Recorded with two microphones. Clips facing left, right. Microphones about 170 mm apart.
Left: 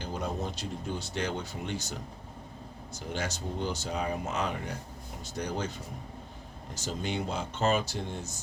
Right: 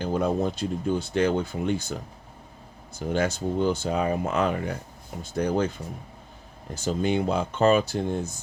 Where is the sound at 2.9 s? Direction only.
55° right (ahead or behind).